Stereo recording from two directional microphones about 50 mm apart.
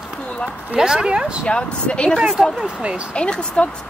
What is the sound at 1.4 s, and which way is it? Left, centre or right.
Speech, left.